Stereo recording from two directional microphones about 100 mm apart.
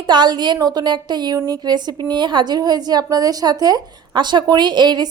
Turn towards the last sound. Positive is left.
turn(degrees=-50)  # may be behind; listen again after turning